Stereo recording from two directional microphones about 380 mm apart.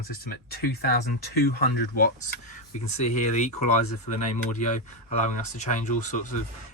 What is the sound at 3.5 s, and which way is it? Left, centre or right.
Speech, left.